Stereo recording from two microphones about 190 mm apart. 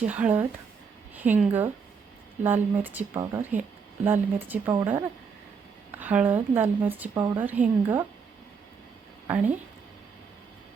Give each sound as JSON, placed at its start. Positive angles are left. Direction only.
{"t": 0.0, "sound": "a woman's voice", "side_deg": -10}